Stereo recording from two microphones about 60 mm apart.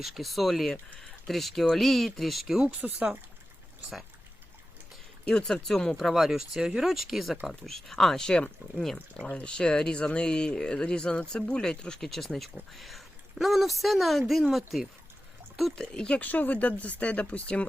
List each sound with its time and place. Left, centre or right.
0.0 s speech: centre
5.2 s speech: centre
6.0 s speech: centre
15.7 s speech: centre
16.2 s speech: left